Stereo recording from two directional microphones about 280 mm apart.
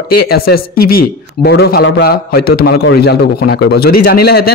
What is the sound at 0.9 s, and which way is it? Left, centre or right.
A man's voice, left.